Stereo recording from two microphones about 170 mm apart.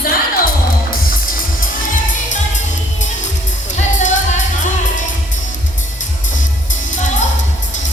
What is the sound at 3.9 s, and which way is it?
Music, 45° left (ahead or behind).